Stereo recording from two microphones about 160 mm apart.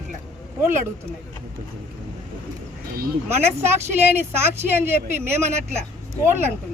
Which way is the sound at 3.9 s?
15° right (ahead or behind).